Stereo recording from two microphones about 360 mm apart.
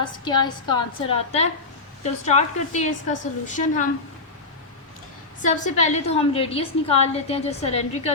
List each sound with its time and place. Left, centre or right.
0.0 s a woman's voice: centre
5.4 s a woman's voice: left